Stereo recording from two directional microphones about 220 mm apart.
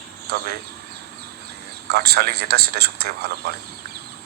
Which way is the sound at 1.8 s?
45° right (ahead or behind).